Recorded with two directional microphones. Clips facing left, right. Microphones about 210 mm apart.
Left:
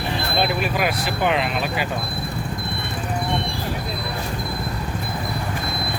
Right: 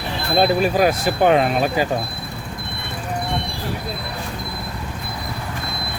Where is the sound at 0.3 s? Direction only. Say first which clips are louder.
Right 7 dB; 40° right (ahead or behind).